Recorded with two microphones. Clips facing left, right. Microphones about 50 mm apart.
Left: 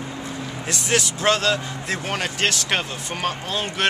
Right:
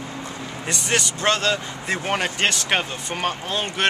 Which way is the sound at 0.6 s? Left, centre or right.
Centre.